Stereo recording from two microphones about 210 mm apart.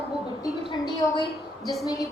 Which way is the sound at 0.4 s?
15° left (ahead or behind).